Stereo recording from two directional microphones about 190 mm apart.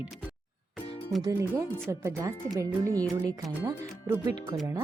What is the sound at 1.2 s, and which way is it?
Speech, 15° right (ahead or behind).